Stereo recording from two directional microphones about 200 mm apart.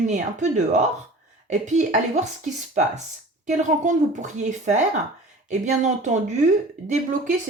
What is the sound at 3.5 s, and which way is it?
Speech, 35° right (ahead or behind).